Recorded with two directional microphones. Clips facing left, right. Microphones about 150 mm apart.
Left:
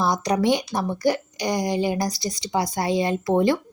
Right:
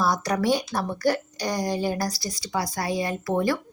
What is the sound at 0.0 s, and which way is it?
A woman's voice, 20° left (ahead or behind).